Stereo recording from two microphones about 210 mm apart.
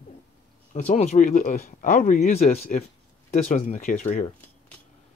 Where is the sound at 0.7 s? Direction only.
35° left (ahead or behind).